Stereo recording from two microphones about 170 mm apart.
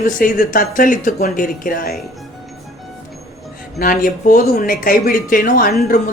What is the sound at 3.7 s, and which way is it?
A woman's voice, 55° left (ahead or behind).